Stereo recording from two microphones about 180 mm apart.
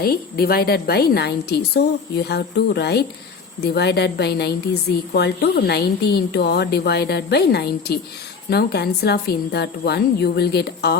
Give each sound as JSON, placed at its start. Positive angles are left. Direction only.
{"t": 0.0, "sound": "a woman's voice", "side_deg": 60}